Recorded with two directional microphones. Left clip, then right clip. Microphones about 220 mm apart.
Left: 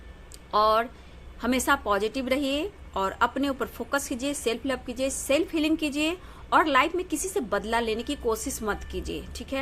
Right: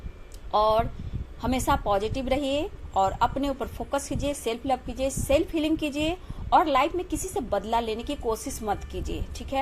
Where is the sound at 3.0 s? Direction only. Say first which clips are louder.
Right 2 dB; 55° left (ahead or behind).